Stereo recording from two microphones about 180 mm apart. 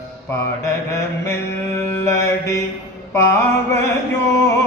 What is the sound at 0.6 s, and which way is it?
Mantra, 15° left (ahead or behind).